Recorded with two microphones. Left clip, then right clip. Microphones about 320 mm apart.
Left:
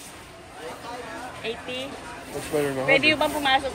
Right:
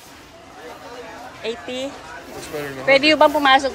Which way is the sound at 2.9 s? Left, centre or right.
Right.